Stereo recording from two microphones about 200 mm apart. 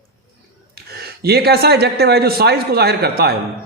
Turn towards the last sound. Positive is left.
turn(degrees=-50)  # may be behind; listen again after turning